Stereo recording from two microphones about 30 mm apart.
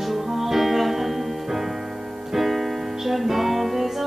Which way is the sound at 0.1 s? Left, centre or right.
Centre.